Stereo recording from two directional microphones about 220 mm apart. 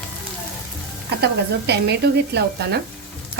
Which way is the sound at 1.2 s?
50° right (ahead or behind).